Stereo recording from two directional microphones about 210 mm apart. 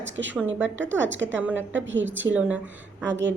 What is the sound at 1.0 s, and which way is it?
Speech, 60° right (ahead or behind).